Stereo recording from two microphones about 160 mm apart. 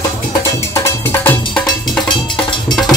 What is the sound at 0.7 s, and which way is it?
Music, 10° left (ahead or behind).